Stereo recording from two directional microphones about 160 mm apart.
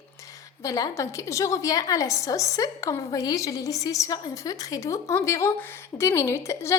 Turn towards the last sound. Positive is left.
turn(degrees=15)  # may be behind; listen again after turning